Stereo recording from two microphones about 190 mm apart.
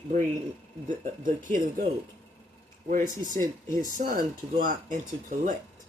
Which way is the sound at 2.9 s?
45° right (ahead or behind).